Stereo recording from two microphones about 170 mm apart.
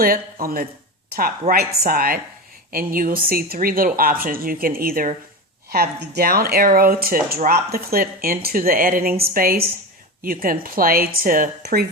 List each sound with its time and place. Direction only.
0.0 s speech: 60° right (ahead or behind)